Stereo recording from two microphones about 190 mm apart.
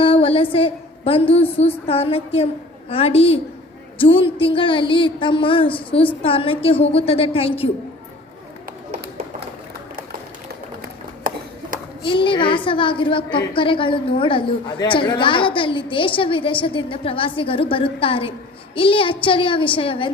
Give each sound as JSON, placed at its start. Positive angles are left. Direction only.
{"t": 0.0, "sound": "a woman's voice", "side_deg": 30}
{"t": 12.0, "sound": "a woman's voice", "side_deg": 25}